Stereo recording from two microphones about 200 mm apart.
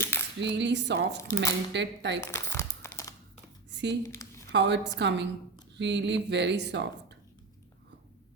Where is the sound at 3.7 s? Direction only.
60° right (ahead or behind).